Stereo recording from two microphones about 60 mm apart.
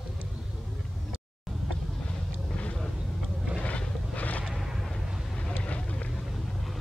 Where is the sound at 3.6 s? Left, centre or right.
Left.